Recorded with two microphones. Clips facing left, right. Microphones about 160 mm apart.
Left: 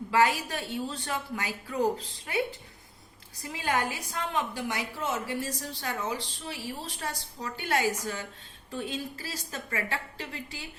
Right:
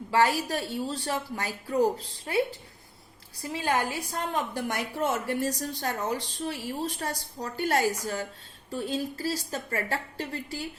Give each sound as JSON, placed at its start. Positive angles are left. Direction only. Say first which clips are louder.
{"t": 0.1, "sound": "a woman's voice", "louder": "right 1 dB", "side_deg": -35}
{"t": 3.5, "sound": "a woman's voice", "louder": "right 2 dB", "side_deg": -30}
{"t": 4.3, "sound": "a woman's voice", "louder": "even", "side_deg": -50}